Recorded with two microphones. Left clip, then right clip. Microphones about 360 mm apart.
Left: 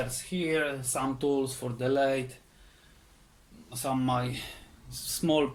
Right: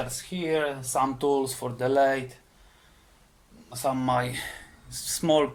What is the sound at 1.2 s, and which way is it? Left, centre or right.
Speech, right.